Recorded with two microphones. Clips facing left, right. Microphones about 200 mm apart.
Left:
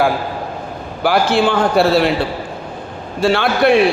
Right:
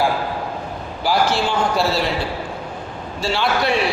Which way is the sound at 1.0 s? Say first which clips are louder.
Left 5 dB; 55° left (ahead or behind).